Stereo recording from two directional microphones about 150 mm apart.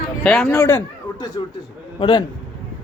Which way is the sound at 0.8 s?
30° left (ahead or behind).